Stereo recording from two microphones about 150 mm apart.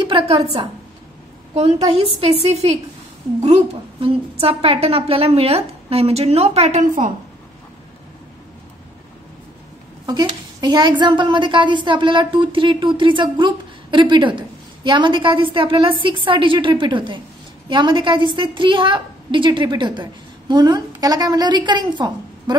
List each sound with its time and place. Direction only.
0.0 s a woman's voice: 35° right (ahead or behind)
2.1 s a woman's voice: 40° right (ahead or behind)
4.0 s a woman's voice: 40° right (ahead or behind); by 7.1 s 60° right (ahead or behind)
10.0 s a woman's voice: 30° right (ahead or behind)